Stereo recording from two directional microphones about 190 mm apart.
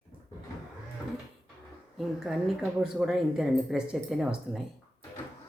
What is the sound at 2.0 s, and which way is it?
Speech, centre (ahead or behind).